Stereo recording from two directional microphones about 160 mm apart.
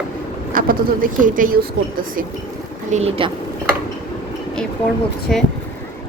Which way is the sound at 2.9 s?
40° right (ahead or behind).